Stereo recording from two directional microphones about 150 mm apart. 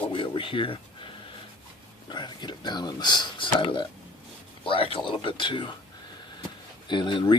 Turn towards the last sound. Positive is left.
turn(degrees=30)  # may be behind; listen again after turning